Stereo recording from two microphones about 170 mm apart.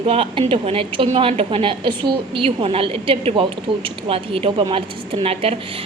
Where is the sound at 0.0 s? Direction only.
35° right (ahead or behind).